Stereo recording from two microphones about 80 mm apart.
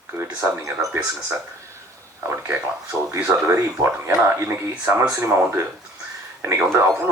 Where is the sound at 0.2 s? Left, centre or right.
Right.